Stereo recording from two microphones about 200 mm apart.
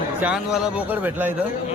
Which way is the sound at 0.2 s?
5° right (ahead or behind).